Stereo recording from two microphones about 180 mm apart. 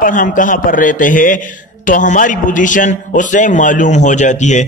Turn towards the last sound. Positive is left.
turn(degrees=40)  # may be behind; listen again after turning